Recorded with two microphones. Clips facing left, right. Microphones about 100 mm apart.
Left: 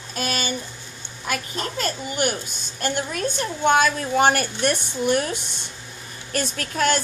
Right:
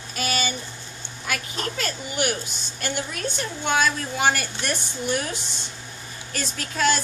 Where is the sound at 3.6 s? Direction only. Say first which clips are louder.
Left 5 dB; 45° left (ahead or behind).